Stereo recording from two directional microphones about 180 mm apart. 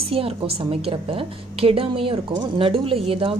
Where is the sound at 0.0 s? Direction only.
30° right (ahead or behind).